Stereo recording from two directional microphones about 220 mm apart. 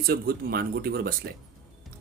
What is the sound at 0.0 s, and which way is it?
Speech, 45° right (ahead or behind).